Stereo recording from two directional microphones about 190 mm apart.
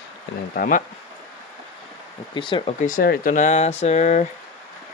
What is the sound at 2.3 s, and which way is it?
Speech, 25° left (ahead or behind).